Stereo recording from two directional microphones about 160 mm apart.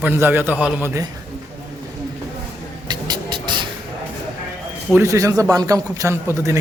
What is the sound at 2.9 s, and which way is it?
Vehicle, 30° right (ahead or behind).